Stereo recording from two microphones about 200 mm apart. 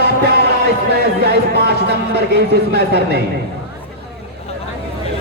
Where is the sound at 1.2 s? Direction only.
55° right (ahead or behind).